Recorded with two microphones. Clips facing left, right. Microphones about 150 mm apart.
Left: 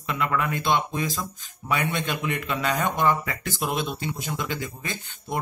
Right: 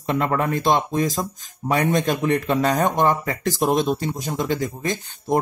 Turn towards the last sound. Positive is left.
turn(degrees=-40)  # may be behind; listen again after turning